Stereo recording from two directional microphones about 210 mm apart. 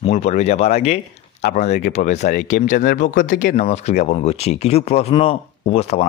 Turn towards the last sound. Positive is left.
turn(degrees=30)  # may be behind; listen again after turning